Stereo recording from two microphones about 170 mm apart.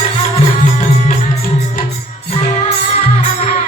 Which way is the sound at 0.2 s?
45° left (ahead or behind).